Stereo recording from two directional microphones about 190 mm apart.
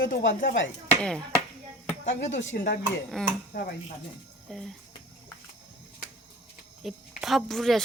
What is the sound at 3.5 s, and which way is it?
Speech, 55° left (ahead or behind).